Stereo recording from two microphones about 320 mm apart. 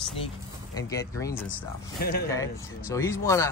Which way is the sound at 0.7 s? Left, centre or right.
Centre.